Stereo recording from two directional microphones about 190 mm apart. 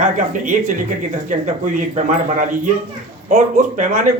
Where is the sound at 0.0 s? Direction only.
40° right (ahead or behind).